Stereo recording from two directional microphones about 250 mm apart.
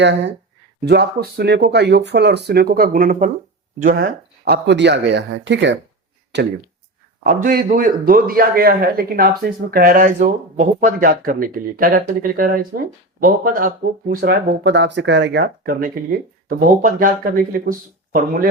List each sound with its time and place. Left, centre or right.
0.0 s a man's voice: right
7.3 s a man's voice: right